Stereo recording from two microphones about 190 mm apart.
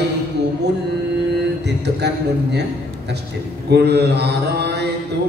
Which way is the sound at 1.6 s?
60° right (ahead or behind).